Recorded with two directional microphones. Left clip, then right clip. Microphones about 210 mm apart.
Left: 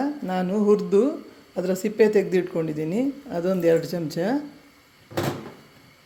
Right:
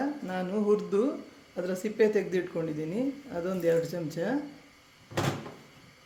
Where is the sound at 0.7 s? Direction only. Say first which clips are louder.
Left 7 dB; 35° left (ahead or behind).